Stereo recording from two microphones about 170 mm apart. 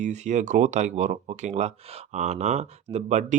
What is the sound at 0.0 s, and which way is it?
Speech, 45° right (ahead or behind).